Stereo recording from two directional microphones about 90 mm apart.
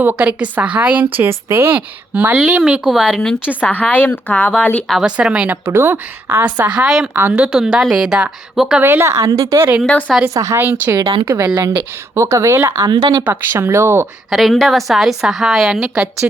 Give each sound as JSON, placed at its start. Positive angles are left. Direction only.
{"t": 0.0, "sound": "a woman's voice", "side_deg": -15}
{"t": 2.8, "sound": "a woman's voice", "side_deg": -5}
{"t": 3.5, "sound": "speech", "side_deg": 15}
{"t": 5.0, "sound": "a woman's voice", "side_deg": -10}
{"t": 5.6, "sound": "speech", "side_deg": -25}
{"t": 7.2, "sound": "a woman's voice", "side_deg": -20}
{"t": 8.8, "sound": "a woman's voice", "side_deg": -25}
{"t": 10.6, "sound": "speech", "side_deg": -25}
{"t": 11.0, "sound": "speech", "side_deg": -85}
{"t": 12.1, "sound": "a woman's voice", "side_deg": -35}
{"t": 12.9, "sound": "speech", "side_deg": -50}
{"t": 13.2, "sound": "speech", "side_deg": -25}
{"t": 14.3, "sound": "a woman's voice", "side_deg": 0}